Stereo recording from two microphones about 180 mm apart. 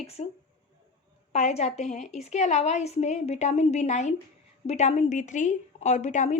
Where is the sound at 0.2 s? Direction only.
35° left (ahead or behind).